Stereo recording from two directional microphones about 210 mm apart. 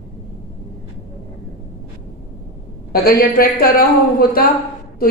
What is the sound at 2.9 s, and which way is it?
Speech, 45° left (ahead or behind).